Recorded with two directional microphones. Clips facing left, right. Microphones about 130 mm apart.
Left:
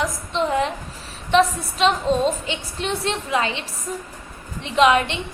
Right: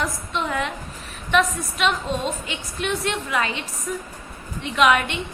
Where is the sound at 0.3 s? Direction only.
30° left (ahead or behind).